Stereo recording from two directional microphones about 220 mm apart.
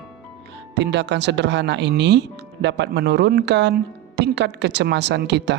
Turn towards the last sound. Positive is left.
turn(degrees=-50)  # may be behind; listen again after turning